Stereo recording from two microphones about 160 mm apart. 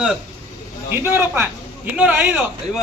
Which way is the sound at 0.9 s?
15° right (ahead or behind).